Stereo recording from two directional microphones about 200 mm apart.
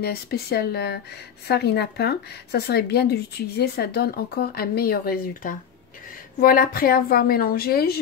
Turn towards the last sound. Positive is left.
turn(degrees=50)  # may be behind; listen again after turning